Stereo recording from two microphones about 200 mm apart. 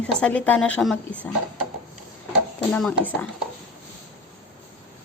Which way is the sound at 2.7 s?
5° left (ahead or behind).